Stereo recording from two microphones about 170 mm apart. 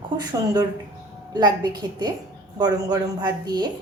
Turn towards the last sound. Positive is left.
turn(degrees=-25)  # may be behind; listen again after turning